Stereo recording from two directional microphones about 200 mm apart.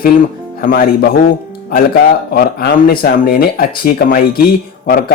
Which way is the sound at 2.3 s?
50° left (ahead or behind).